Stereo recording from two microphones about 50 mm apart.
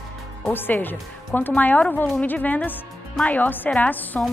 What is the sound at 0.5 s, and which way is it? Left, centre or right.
Speech, left.